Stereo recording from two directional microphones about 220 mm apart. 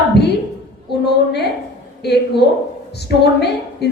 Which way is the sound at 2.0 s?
50° left (ahead or behind).